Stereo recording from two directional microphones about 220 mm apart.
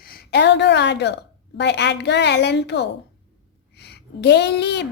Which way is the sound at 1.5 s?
50° left (ahead or behind).